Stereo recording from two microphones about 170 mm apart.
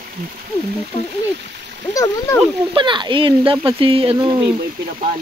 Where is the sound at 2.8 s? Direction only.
30° right (ahead or behind).